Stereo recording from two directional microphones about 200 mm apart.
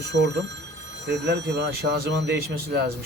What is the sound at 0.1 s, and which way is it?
A man's voice, 60° right (ahead or behind).